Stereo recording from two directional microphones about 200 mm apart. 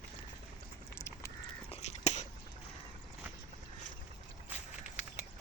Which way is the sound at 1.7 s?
35° left (ahead or behind).